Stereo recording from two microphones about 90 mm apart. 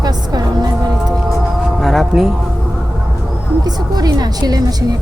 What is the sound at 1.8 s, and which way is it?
Speech, centre (ahead or behind).